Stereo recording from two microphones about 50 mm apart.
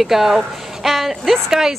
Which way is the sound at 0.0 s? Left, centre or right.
Centre.